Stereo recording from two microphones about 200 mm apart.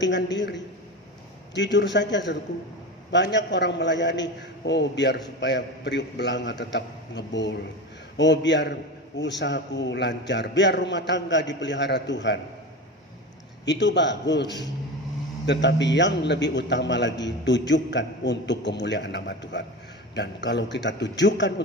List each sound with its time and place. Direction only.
0.0 s a man's voice: 60° left (ahead or behind)
13.7 s a man's voice: 60° left (ahead or behind)